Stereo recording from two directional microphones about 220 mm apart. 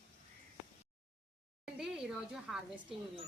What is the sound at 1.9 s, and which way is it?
Speech, 5° right (ahead or behind).